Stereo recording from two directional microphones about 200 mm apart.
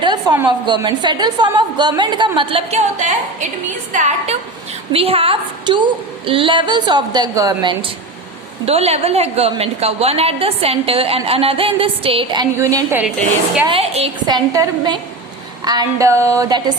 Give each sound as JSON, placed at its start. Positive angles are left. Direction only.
{"t": 0.0, "sound": "a sound", "side_deg": -20}
{"t": 0.4, "sound": "a woman's voice", "side_deg": -20}
{"t": 13.7, "sound": "a woman's voice", "side_deg": -30}